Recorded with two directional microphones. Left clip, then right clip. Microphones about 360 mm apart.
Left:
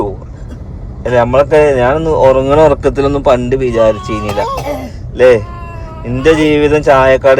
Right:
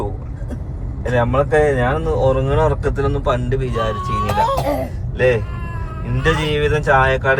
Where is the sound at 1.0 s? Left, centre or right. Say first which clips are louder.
Left 8 dB; left.